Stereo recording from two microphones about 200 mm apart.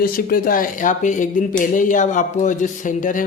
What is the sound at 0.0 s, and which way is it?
Speech, 45° left (ahead or behind).